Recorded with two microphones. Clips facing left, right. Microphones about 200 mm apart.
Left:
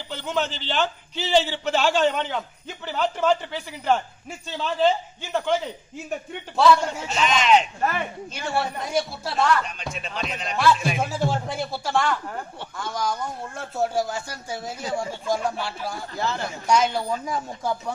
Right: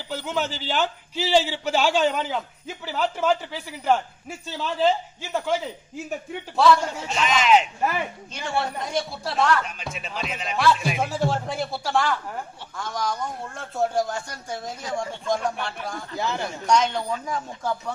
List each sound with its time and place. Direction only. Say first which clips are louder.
0.1 s a man's voice: even; 5° right (ahead or behind)
6.6 s a man's voice: left 1 dB; centre (ahead or behind)
8.3 s a man's voice: left 1 dB; 5° left (ahead or behind)
16.1 s a man's voice: right 1 dB; 15° right (ahead or behind)
16.6 s speech: left 1 dB; 5° left (ahead or behind)